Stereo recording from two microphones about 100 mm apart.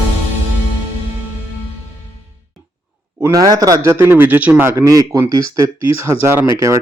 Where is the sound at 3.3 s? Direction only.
35° right (ahead or behind); by 4.7 s 20° right (ahead or behind).